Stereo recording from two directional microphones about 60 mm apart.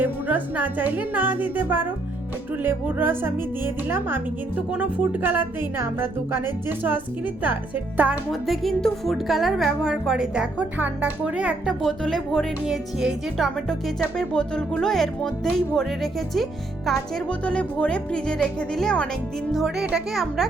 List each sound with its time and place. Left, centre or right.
0.0 s speech: right
4.5 s speech: right
8.3 s a woman's voice: centre
10.8 s speech: right
11.8 s speech: centre
12.6 s a woman's voice: centre
13.3 s speech: centre
14.8 s speech: centre
17.2 s speech: left
19.5 s a woman's voice: centre